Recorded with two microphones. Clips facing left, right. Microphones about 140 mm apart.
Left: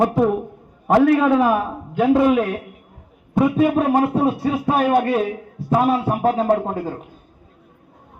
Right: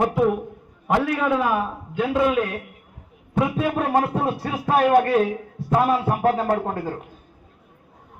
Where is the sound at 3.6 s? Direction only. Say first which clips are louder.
Left 5 dB; 15° left (ahead or behind).